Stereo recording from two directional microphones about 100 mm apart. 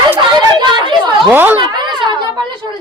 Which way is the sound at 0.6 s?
50° right (ahead or behind).